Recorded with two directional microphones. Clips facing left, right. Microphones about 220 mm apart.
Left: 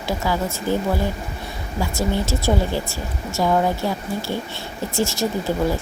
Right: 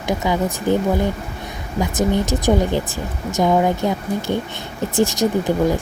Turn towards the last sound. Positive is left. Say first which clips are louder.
# right 4 dB
turn(degrees=-15)  # may be behind; listen again after turning